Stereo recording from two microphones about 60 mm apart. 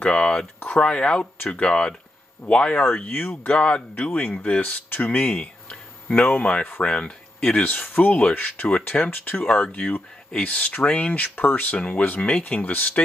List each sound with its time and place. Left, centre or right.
0.0 s speech: centre
3.0 s speech: left
3.4 s speech: centre
4.8 s speech: left
5.2 s a sound: centre
6.3 s speech: left